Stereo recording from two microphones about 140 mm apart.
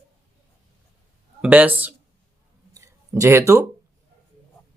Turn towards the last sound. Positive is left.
turn(degrees=-20)  # may be behind; listen again after turning